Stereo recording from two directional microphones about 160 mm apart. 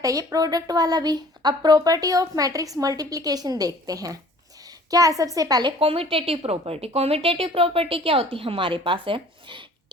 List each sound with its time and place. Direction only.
0.0 s a woman's voice: 20° right (ahead or behind)